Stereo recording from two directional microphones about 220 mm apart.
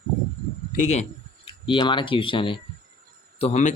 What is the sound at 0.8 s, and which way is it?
Speech, 30° left (ahead or behind).